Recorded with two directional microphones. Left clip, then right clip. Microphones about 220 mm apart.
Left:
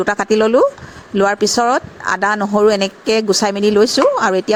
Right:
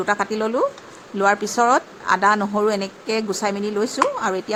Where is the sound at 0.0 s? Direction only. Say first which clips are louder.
Left 7 dB; 30° left (ahead or behind).